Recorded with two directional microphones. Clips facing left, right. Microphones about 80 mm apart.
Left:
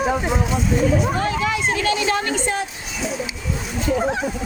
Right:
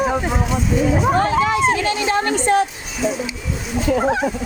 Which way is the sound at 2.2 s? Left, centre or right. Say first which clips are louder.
Right 6 dB; right.